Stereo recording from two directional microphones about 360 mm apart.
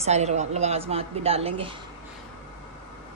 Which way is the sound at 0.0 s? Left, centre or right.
Centre.